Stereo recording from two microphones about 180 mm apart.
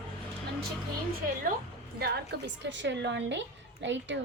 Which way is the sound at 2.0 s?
65° right (ahead or behind).